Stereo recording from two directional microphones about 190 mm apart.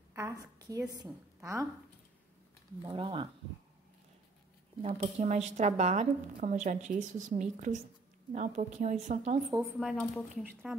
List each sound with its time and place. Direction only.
0.1 s a woman's voice: 15° right (ahead or behind)
2.9 s speech: 25° right (ahead or behind)
4.8 s speech: 40° right (ahead or behind)
9.8 s speech: centre (ahead or behind)